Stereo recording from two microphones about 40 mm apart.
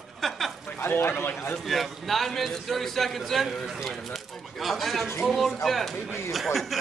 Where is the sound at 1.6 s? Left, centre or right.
Centre.